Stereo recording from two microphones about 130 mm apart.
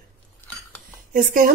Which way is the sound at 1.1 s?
90° right.